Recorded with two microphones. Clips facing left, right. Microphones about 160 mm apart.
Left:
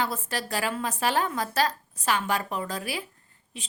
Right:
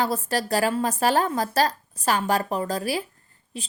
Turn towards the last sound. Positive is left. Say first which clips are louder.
# right 7 dB
turn(degrees=-35)  # may be behind; listen again after turning